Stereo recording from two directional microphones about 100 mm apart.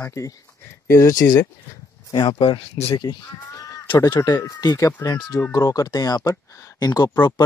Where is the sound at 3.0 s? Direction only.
40° left (ahead or behind).